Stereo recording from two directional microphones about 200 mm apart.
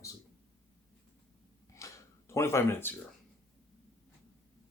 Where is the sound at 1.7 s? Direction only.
15° left (ahead or behind).